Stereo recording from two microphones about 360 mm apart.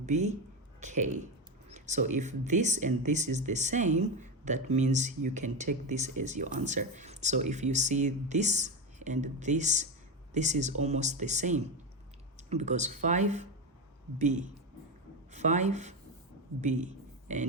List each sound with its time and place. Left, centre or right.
0.0 s a man's voice: centre